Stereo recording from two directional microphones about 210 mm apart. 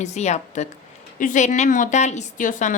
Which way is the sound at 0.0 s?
30° left (ahead or behind).